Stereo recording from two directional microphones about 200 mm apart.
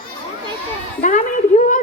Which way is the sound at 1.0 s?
40° left (ahead or behind).